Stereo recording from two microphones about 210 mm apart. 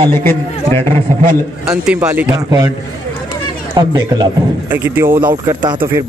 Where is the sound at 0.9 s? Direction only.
40° right (ahead or behind).